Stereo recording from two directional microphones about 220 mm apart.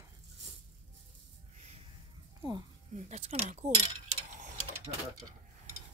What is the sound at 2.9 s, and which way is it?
Speech, 30° right (ahead or behind).